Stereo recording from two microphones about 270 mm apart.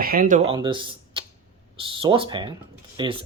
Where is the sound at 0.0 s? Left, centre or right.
Right.